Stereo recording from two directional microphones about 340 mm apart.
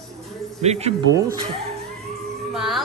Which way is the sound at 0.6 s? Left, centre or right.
Centre.